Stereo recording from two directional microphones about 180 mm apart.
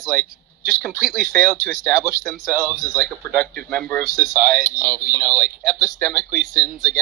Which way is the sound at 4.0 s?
50° right (ahead or behind).